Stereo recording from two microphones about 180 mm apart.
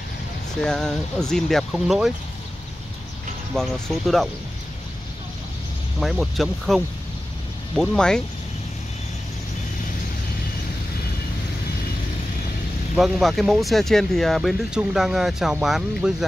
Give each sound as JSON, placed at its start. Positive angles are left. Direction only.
{"t": 0.6, "sound": "speech", "side_deg": 5}
{"t": 3.5, "sound": "speech", "side_deg": 5}
{"t": 5.9, "sound": "speech", "side_deg": 0}
{"t": 12.9, "sound": "speech", "side_deg": 0}